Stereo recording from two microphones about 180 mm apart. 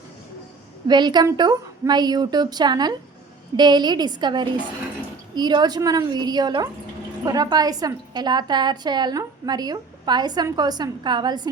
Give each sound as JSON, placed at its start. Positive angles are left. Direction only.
{"t": 0.9, "sound": "a woman's voice", "side_deg": -25}